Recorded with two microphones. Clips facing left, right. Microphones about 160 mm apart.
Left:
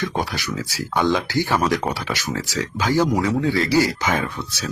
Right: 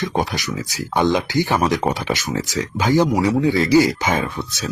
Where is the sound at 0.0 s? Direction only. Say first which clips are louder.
Right 3 dB; 20° right (ahead or behind).